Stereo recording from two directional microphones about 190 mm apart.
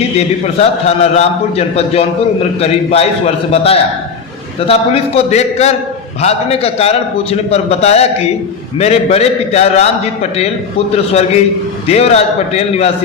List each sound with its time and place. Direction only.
0.2 s a man's voice: 35° left (ahead or behind)
11.9 s a man's voice: 35° left (ahead or behind)